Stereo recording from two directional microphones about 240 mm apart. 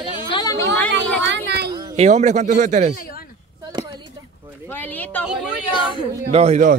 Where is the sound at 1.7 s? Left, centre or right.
Right.